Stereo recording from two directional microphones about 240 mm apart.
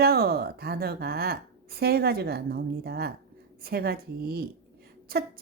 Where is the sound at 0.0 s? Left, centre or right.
Right.